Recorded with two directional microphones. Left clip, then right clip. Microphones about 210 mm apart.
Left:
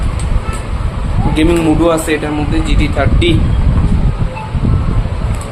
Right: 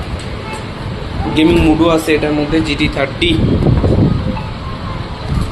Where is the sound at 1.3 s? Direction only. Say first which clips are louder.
Right 1 dB; 20° left (ahead or behind).